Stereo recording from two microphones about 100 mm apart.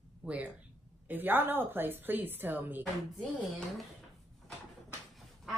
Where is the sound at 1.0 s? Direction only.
20° right (ahead or behind).